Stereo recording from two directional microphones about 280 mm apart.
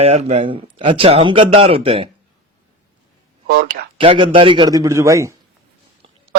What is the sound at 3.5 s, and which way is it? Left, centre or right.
Speech, right.